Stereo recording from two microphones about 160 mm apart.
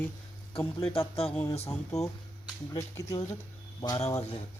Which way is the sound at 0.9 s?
35° left (ahead or behind).